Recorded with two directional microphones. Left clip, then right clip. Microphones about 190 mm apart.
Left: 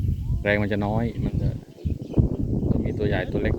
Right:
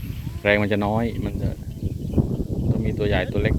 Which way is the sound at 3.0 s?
15° left (ahead or behind).